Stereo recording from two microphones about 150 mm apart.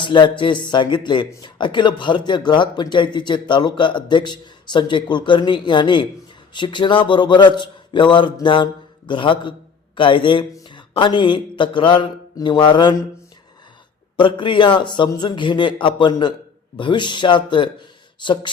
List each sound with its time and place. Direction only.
0.0 s a man's voice: 30° left (ahead or behind)
10.5 s a sound: 30° left (ahead or behind)
14.2 s speech: 35° left (ahead or behind)